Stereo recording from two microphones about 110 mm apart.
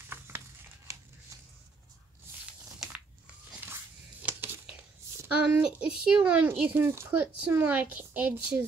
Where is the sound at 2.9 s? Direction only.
15° right (ahead or behind).